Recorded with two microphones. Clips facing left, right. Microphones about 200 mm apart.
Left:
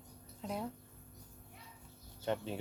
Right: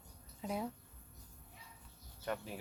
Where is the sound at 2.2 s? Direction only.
25° left (ahead or behind).